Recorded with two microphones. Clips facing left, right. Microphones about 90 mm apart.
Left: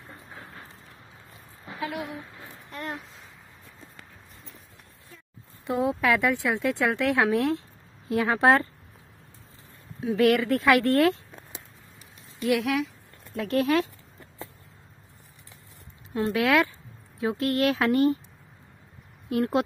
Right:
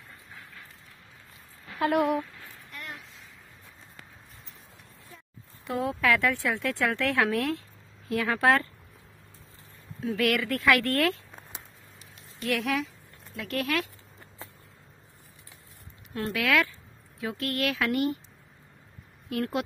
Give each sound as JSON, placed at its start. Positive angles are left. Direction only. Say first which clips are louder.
{"t": 0.1, "sound": "vehicle", "louder": "left 5 dB", "side_deg": 35}
{"t": 1.8, "sound": "a woman's voice", "louder": "right 9 dB", "side_deg": -55}
{"t": 2.3, "sound": "a sound", "louder": "left 3 dB", "side_deg": 20}
{"t": 2.7, "sound": "a sound", "louder": "left 7 dB", "side_deg": 35}
{"t": 5.7, "sound": "speech", "louder": "left 2 dB", "side_deg": 20}
{"t": 9.9, "sound": "speech", "louder": "left 5 dB", "side_deg": 20}
{"t": 12.4, "sound": "a woman's voice", "louder": "left 4 dB", "side_deg": 5}
{"t": 13.3, "sound": "speech", "louder": "left 6 dB", "side_deg": 30}
{"t": 16.1, "sound": "speech", "louder": "left 4 dB", "side_deg": 20}
{"t": 19.2, "sound": "speech", "louder": "left 5 dB", "side_deg": 25}